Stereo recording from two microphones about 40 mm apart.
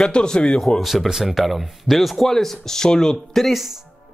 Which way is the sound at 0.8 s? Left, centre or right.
Centre.